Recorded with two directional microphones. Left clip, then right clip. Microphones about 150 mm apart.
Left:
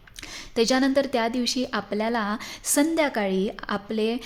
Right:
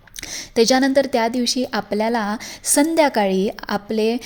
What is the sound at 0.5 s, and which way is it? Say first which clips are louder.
A woman's voice: right 6 dB; 20° right (ahead or behind).